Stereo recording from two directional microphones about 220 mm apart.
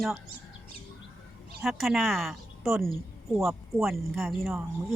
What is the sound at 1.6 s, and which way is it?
Speech, centre (ahead or behind).